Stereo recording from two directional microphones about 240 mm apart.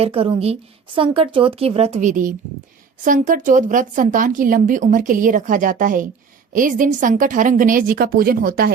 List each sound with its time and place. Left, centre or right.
0.0 s a woman's voice: right